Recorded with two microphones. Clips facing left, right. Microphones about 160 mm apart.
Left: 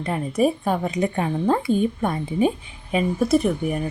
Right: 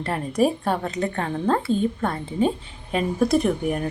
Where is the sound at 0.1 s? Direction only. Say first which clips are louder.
Left 1 dB; centre (ahead or behind).